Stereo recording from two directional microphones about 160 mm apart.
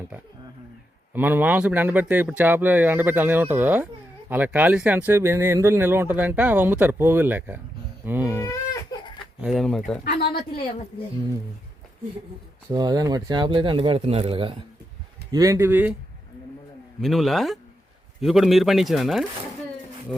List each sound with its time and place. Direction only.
1.1 s speech: 10° right (ahead or behind)
8.4 s baby cry: 20° left (ahead or behind)
9.4 s speech: centre (ahead or behind)
10.0 s a woman's voice: 80° left
12.7 s speech: 25° right (ahead or behind)
15.3 s speech: 20° right (ahead or behind)
17.0 s speech: centre (ahead or behind)